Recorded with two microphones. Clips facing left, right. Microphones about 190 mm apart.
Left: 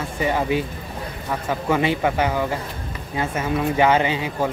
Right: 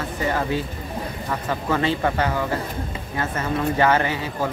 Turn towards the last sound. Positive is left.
turn(degrees=15)  # may be behind; listen again after turning